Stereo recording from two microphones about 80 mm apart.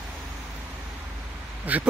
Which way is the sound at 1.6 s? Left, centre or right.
Centre.